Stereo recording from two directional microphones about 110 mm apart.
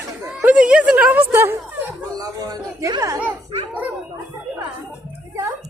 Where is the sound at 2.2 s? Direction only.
35° right (ahead or behind).